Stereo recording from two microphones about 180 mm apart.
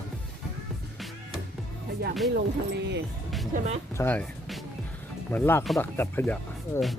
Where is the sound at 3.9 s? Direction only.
10° left (ahead or behind).